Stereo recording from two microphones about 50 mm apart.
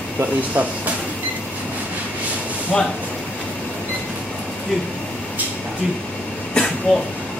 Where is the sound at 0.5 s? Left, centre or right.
Right.